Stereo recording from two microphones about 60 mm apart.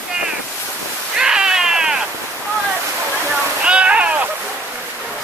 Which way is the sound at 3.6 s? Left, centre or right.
Centre.